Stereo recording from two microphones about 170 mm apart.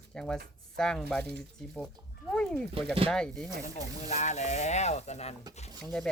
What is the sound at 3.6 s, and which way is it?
Speech, 45° left (ahead or behind).